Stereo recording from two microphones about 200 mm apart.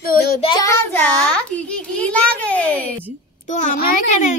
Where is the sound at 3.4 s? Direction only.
40° left (ahead or behind).